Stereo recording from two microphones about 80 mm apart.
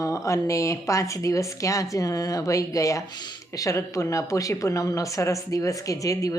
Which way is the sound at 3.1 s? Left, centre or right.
Left.